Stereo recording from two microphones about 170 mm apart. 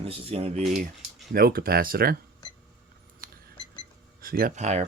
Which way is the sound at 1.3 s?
60° right (ahead or behind).